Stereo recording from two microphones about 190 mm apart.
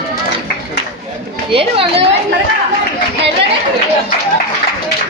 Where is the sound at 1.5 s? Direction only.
30° right (ahead or behind).